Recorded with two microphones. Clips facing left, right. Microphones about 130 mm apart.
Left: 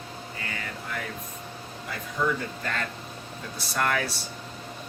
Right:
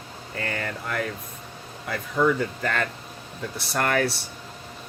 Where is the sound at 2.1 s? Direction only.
65° right (ahead or behind).